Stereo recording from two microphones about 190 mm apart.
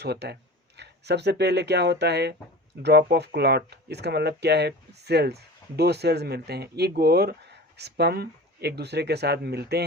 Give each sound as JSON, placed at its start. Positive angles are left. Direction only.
{"t": 0.0, "sound": "speech", "side_deg": -60}